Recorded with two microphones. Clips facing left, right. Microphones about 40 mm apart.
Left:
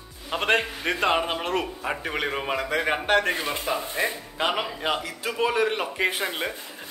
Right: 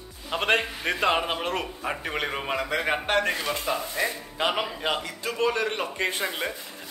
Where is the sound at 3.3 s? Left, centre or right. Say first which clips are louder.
Left 1 dB; centre.